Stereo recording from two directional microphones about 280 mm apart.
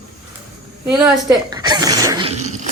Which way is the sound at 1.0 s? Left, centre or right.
Centre.